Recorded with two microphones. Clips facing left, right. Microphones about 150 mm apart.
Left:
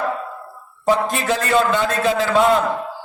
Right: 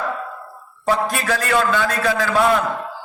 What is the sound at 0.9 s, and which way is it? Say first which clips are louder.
A man's voice: left 2 dB; 20° left (ahead or behind).